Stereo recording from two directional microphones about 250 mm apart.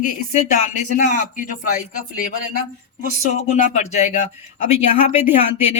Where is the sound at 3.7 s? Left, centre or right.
Left.